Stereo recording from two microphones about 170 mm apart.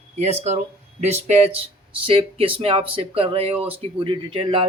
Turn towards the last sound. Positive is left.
turn(degrees=-30)  # may be behind; listen again after turning